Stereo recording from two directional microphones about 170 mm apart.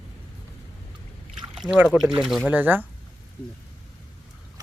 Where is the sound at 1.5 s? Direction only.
5° right (ahead or behind).